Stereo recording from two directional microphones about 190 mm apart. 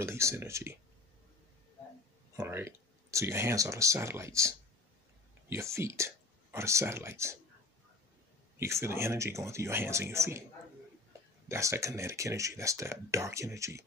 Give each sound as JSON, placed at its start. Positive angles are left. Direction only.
{"t": 0.0, "sound": "speech", "side_deg": -15}
{"t": 2.3, "sound": "speech", "side_deg": -15}
{"t": 8.5, "sound": "speech", "side_deg": -15}
{"t": 11.4, "sound": "speech", "side_deg": -15}